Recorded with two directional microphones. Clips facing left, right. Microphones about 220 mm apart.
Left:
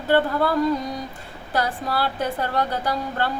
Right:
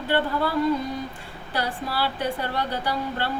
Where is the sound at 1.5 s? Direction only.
45° left (ahead or behind).